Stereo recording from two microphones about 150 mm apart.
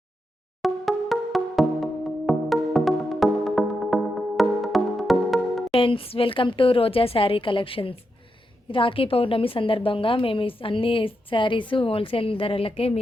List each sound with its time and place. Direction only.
0.6 s music: centre (ahead or behind)
5.7 s a woman's voice: 35° left (ahead or behind)